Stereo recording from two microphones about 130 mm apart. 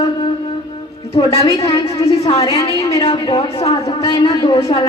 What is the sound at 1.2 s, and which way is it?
Speech, 45° left (ahead or behind).